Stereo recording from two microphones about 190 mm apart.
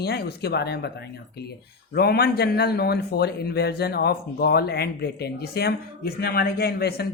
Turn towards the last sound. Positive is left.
turn(degrees=55)  # may be behind; listen again after turning